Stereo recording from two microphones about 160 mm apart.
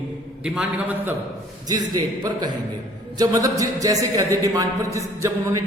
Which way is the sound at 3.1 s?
20° right (ahead or behind).